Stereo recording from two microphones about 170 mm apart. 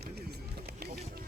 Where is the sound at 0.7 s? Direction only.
70° right (ahead or behind).